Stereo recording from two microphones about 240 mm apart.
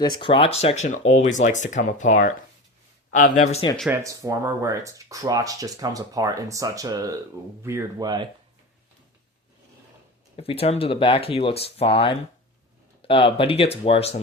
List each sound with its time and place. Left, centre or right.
0.0 s speech: left
3.8 s speech: centre
10.3 s speech: left